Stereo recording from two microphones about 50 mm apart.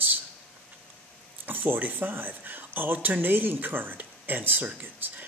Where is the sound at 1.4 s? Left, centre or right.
Right.